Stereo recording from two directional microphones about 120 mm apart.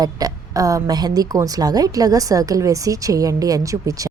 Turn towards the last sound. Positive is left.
turn(degrees=-30)  # may be behind; listen again after turning